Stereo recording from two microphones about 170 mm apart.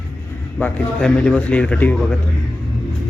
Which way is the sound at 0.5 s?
5° left (ahead or behind).